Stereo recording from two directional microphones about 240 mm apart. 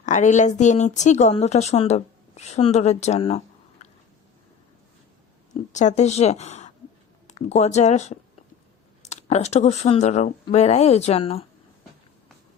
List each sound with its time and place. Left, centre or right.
0.0 s speech: left
5.7 s a woman's voice: left